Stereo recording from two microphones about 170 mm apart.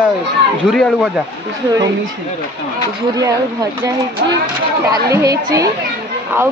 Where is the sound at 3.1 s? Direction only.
20° right (ahead or behind).